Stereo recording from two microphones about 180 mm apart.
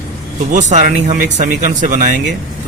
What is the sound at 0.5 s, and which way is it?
Speech, 45° right (ahead or behind).